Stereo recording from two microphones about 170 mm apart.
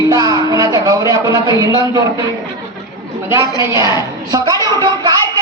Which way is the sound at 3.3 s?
15° right (ahead or behind).